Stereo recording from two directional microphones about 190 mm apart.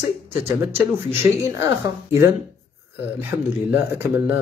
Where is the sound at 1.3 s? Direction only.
15° right (ahead or behind).